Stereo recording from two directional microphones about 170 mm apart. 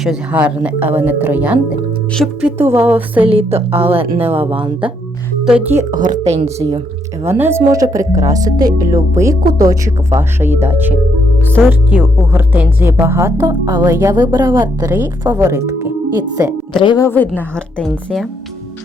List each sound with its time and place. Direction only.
0.0 s speech: 5° right (ahead or behind)
2.6 s speech: 15° right (ahead or behind)
3.2 s a woman's voice: 35° right (ahead or behind)
5.5 s speech: 10° right (ahead or behind)
5.9 s a woman's voice: 50° right (ahead or behind)
7.3 s speech: 15° right (ahead or behind)
16.8 s a woman's voice: 25° left (ahead or behind)
17.1 s a woman's voice: 10° left (ahead or behind)
17.8 s speech: centre (ahead or behind)